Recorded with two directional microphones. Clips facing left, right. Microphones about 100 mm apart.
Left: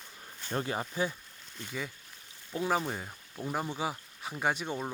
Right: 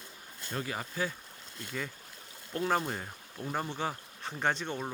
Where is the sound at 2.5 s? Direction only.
5° left (ahead or behind).